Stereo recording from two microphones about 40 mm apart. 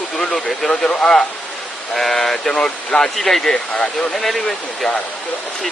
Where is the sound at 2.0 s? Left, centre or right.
Centre.